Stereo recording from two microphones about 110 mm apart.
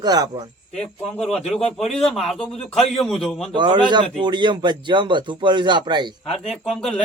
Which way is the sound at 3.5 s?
45° right (ahead or behind).